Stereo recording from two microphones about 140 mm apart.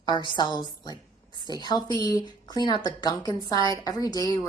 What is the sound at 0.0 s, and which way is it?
A woman's voice, 35° left (ahead or behind).